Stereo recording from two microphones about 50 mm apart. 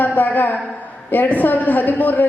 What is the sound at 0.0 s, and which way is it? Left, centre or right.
A woman's voice, left.